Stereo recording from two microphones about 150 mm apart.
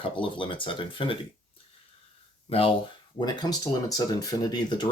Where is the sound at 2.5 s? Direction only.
40° left (ahead or behind).